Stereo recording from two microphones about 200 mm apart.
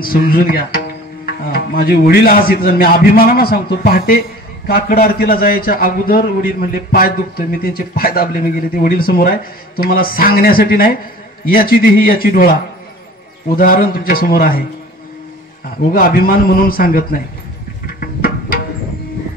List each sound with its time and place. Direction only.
0.0 s a man's voice: 45° left (ahead or behind)
13.6 s a man's voice: 45° left (ahead or behind)
15.9 s a man's voice: 45° left (ahead or behind)
18.0 s music: 45° left (ahead or behind)